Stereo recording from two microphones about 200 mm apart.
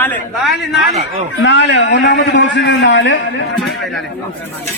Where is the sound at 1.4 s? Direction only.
60° left (ahead or behind).